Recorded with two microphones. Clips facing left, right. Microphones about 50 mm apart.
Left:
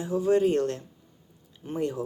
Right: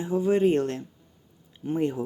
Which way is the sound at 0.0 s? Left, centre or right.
Centre.